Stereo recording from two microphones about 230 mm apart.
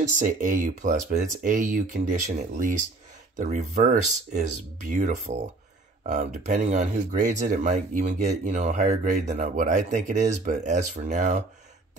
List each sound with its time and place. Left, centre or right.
0.2 s speech: right